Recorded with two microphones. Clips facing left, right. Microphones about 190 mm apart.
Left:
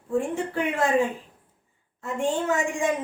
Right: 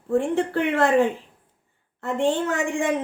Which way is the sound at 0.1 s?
65° right (ahead or behind).